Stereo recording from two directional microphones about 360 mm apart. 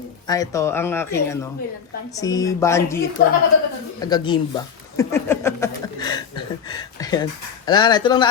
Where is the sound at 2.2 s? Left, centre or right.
Centre.